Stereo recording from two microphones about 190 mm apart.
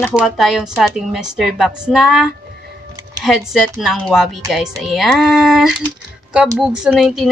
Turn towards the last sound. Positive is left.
turn(degrees=0)  # may be behind; listen again after turning